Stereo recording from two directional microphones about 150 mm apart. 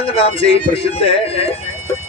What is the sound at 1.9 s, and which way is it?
Vehicle, 20° left (ahead or behind).